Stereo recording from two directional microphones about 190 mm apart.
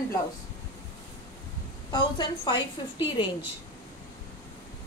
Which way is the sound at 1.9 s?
25° left (ahead or behind).